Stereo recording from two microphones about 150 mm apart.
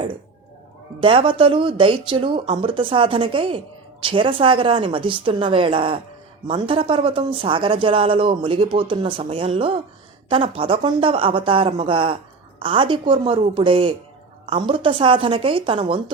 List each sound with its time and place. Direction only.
1.0 s speech: 35° right (ahead or behind)